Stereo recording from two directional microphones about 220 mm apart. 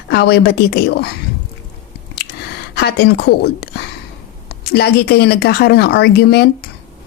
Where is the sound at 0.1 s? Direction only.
50° left (ahead or behind).